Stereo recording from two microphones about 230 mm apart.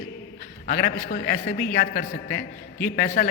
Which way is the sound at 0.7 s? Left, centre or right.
Left.